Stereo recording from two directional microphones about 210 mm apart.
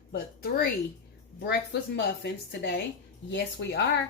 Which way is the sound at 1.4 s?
55° left (ahead or behind).